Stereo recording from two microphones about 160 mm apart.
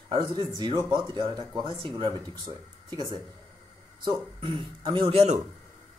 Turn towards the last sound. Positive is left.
turn(degrees=-35)  # may be behind; listen again after turning